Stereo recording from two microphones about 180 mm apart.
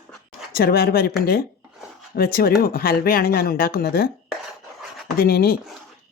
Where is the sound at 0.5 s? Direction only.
60° left (ahead or behind).